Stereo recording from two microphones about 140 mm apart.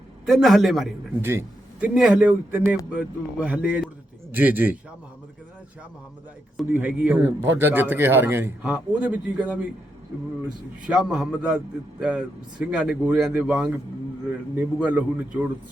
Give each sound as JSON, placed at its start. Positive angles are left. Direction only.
{"t": 0.3, "sound": "a man's voice", "side_deg": 0}
{"t": 1.2, "sound": "a man's voice", "side_deg": -15}
{"t": 1.9, "sound": "a man's voice", "side_deg": -5}
{"t": 6.7, "sound": "a man's voice", "side_deg": -10}
{"t": 10.8, "sound": "a man's voice", "side_deg": -5}